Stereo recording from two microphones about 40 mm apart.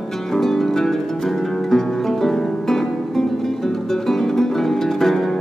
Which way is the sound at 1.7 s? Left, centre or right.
Centre.